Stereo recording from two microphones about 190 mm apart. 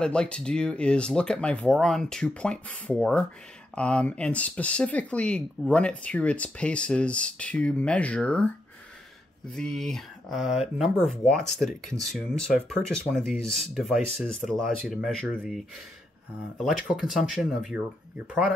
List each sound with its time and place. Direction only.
0.0 s speech: 5° left (ahead or behind)
9.5 s speech: centre (ahead or behind)
16.8 s speech: centre (ahead or behind)